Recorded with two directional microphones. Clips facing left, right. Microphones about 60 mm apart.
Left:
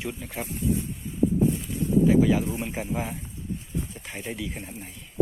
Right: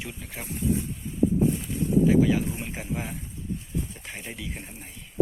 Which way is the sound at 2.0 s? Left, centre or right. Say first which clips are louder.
Left 1 dB; centre.